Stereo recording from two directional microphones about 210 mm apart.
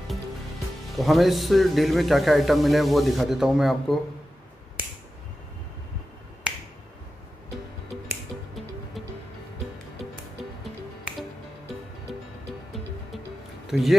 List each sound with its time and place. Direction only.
0.9 s a man's voice: centre (ahead or behind)
6.5 s finger snapping: 5° right (ahead or behind)
12.1 s music: centre (ahead or behind)
13.7 s music: centre (ahead or behind)